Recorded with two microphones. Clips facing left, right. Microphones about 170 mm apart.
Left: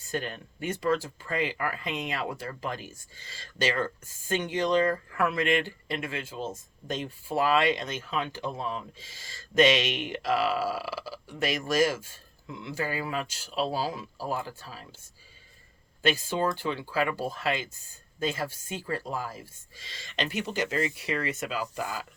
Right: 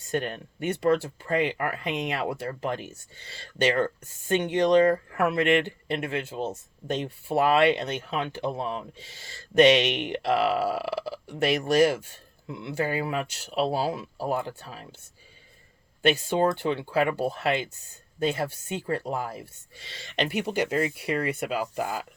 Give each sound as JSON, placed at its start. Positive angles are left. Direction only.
{"t": 0.1, "sound": "speech", "side_deg": -60}
{"t": 16.0, "sound": "speech", "side_deg": -65}